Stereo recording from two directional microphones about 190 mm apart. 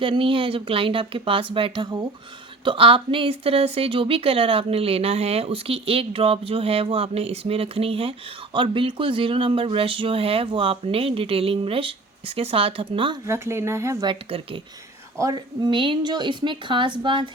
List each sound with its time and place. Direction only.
0.0 s a woman's voice: 30° right (ahead or behind)
13.2 s speech: 15° right (ahead or behind)